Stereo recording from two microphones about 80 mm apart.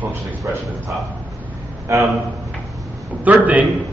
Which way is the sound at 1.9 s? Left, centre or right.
Right.